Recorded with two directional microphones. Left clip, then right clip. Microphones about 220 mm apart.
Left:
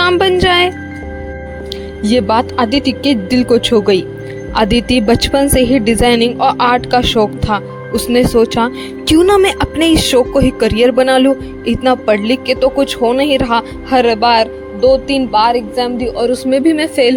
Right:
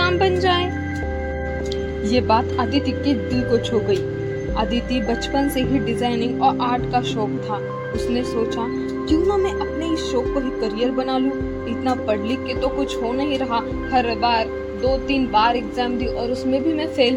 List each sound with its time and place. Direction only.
0.0 s music: 40° left (ahead or behind)
2.0 s speech: 35° left (ahead or behind)